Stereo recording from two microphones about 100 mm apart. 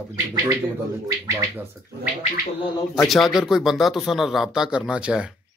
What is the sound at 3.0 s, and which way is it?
Speech, centre (ahead or behind).